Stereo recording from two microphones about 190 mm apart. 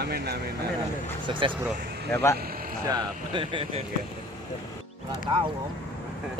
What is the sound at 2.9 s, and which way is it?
Speech, 25° right (ahead or behind).